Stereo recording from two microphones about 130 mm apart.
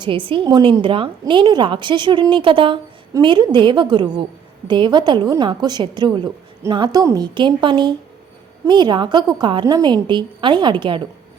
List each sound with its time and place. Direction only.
0.0 s a woman's voice: 40° right (ahead or behind)